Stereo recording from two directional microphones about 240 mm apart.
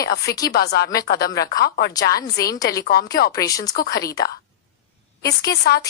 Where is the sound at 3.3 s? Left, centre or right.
Centre.